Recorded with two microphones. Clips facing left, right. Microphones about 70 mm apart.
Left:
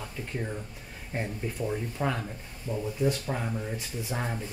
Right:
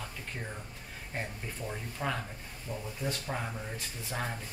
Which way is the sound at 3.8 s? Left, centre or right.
Centre.